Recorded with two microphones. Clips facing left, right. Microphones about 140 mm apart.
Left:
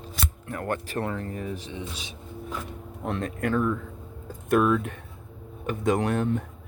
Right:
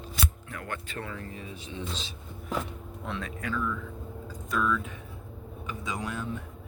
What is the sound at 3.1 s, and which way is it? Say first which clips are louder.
Speech: left 7 dB; 50° left (ahead or behind).